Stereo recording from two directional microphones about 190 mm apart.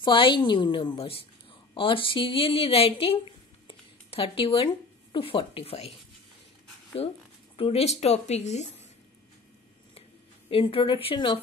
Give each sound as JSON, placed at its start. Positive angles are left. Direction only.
{"t": 0.0, "sound": "a woman's voice", "side_deg": 25}
{"t": 3.6, "sound": "a sound", "side_deg": 30}
{"t": 5.1, "sound": "a woman's voice", "side_deg": 30}
{"t": 7.0, "sound": "a woman's voice", "side_deg": 30}
{"t": 10.5, "sound": "a woman's voice", "side_deg": 30}